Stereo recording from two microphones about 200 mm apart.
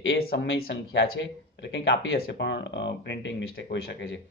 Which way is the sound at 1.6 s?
65° left (ahead or behind).